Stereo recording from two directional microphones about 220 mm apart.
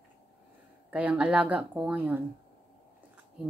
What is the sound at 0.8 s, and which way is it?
Speech, 5° right (ahead or behind).